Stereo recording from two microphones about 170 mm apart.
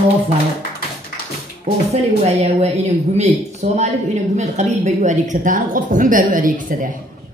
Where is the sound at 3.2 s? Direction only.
40° right (ahead or behind).